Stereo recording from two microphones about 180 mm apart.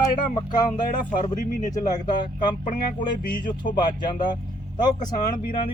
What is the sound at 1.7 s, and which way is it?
Speech, 25° left (ahead or behind).